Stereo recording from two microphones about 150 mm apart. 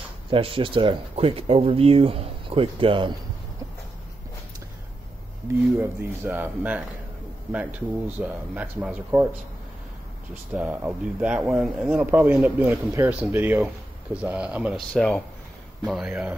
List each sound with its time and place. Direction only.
0.3 s speech: 35° right (ahead or behind)
5.8 s a man's voice: 15° right (ahead or behind)
8.2 s a man's voice: 10° right (ahead or behind)
10.5 s a man's voice: 10° right (ahead or behind)
14.9 s speech: 5° left (ahead or behind)